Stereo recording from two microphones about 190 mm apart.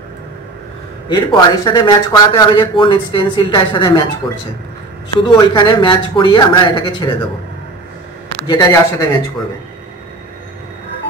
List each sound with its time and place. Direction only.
1.0 s speech: 25° left (ahead or behind)
5.2 s speech: 25° left (ahead or behind)
8.5 s speech: 20° left (ahead or behind)